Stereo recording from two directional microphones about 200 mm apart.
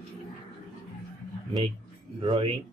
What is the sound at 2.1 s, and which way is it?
Speech, 25° right (ahead or behind).